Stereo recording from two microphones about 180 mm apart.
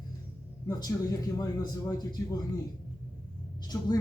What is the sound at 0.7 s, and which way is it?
Speech, 20° left (ahead or behind).